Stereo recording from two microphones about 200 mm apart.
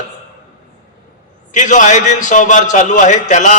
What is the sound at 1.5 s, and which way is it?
A man's voice, 40° left (ahead or behind).